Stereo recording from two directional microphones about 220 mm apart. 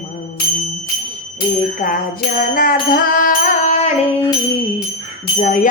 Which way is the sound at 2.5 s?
40° left (ahead or behind).